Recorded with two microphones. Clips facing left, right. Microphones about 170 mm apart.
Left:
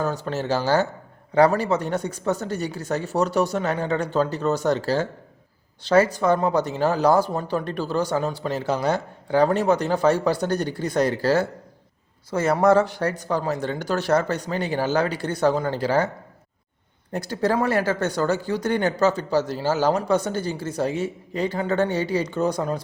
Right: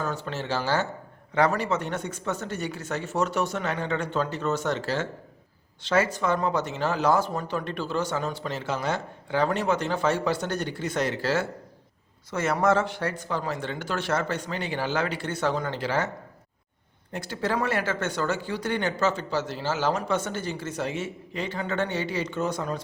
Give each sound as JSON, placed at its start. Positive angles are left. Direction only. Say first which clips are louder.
{"t": 0.0, "sound": "speech", "louder": "left 5 dB", "side_deg": 40}
{"t": 17.1, "sound": "speech", "louder": "left 6 dB", "side_deg": 40}